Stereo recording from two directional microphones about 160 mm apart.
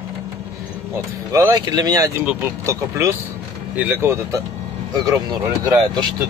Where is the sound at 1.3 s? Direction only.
20° right (ahead or behind).